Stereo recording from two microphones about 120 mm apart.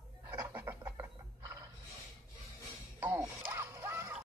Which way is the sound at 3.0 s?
20° right (ahead or behind).